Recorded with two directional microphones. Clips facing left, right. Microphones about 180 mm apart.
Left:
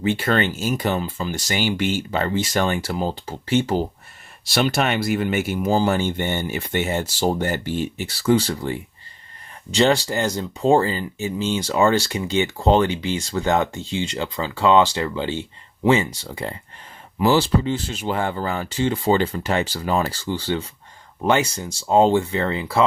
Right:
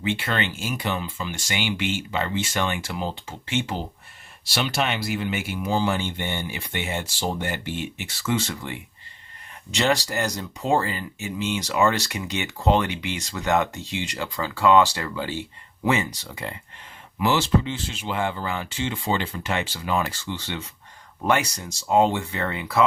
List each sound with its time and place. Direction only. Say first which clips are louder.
0.0 s speech: left 6 dB; 40° left (ahead or behind)